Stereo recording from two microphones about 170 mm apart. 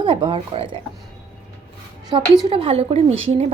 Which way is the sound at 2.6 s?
35° right (ahead or behind).